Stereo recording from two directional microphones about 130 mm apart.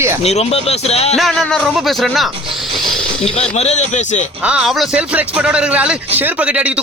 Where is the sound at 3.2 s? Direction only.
50° left (ahead or behind).